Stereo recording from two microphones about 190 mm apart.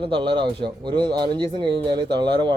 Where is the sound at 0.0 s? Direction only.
25° right (ahead or behind).